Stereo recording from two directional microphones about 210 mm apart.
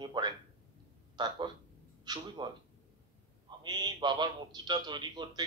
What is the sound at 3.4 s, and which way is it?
A man's voice, 20° right (ahead or behind).